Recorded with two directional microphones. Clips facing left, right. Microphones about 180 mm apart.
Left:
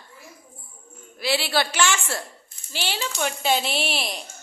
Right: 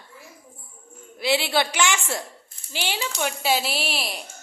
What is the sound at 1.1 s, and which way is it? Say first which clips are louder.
A woman's voice: right 1 dB; 20° right (ahead or behind).